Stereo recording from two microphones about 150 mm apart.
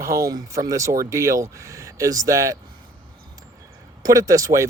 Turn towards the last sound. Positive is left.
turn(degrees=-20)  # may be behind; listen again after turning